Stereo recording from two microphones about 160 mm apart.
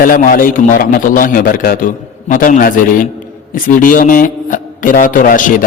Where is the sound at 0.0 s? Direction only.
60° left (ahead or behind).